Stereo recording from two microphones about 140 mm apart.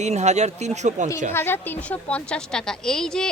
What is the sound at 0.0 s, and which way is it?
Speech, 55° right (ahead or behind).